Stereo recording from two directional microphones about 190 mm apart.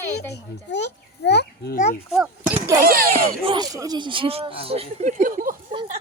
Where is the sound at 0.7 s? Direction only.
65° left (ahead or behind).